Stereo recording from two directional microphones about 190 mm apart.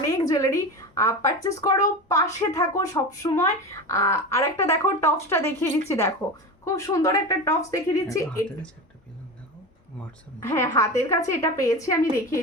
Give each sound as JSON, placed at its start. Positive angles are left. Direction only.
{"t": 0.1, "sound": "speech", "side_deg": 20}
{"t": 10.5, "sound": "speech", "side_deg": 15}